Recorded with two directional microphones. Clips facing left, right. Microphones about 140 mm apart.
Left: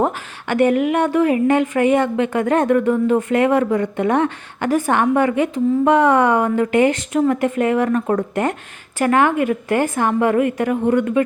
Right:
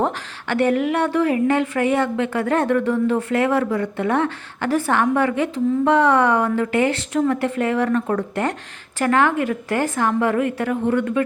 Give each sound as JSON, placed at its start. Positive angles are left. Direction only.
{"t": 0.0, "sound": "a woman's voice", "side_deg": 15}